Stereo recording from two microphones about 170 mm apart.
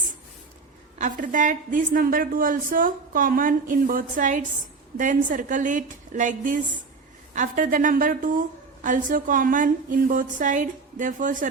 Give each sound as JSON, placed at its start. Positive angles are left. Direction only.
{"t": 0.9, "sound": "a woman's voice", "side_deg": -50}